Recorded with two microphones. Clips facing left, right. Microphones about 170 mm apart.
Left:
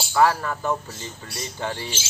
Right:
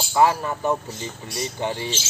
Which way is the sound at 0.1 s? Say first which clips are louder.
Right 1 dB; 20° right (ahead or behind).